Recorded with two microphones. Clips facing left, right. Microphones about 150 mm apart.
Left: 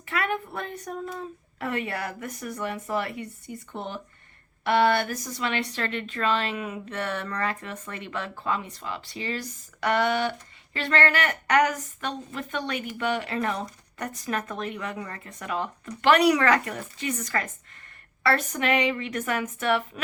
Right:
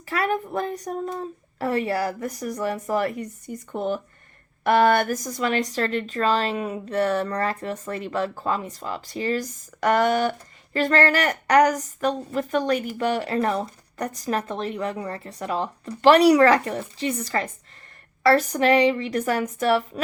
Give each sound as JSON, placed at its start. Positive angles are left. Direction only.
{"t": 0.1, "sound": "speech", "side_deg": -35}